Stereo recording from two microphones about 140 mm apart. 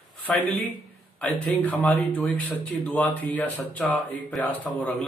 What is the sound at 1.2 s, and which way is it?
A man's voice, 5° left (ahead or behind).